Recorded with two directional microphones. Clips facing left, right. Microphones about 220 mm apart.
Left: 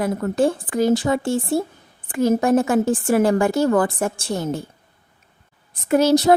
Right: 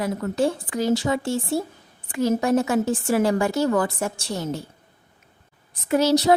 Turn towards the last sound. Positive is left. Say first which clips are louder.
# left 3 dB
turn(degrees=50)  # may be behind; listen again after turning